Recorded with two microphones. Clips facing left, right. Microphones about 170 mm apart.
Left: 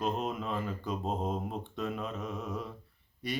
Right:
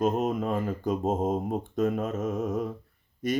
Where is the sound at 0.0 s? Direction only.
45° right (ahead or behind).